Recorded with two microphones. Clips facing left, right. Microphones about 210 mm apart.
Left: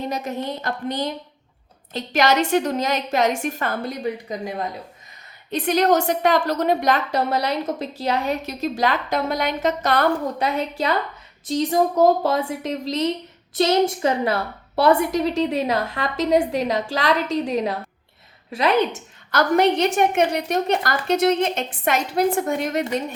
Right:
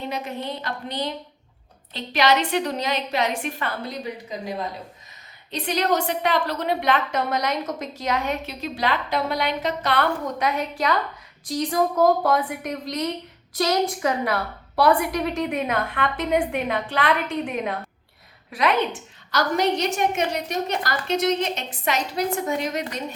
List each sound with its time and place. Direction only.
0.1 s a woman's voice: 45° left (ahead or behind)
5.5 s a woman's voice: 50° left (ahead or behind); by 18.8 s 30° left (ahead or behind)
18.9 s a woman's voice: 55° left (ahead or behind)